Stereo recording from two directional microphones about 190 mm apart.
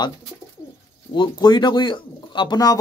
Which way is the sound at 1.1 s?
25° left (ahead or behind).